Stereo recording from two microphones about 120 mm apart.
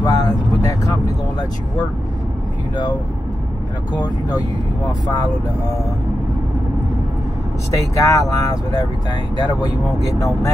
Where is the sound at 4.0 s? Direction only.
35° left (ahead or behind).